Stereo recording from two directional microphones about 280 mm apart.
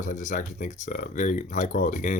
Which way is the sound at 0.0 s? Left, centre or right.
Left.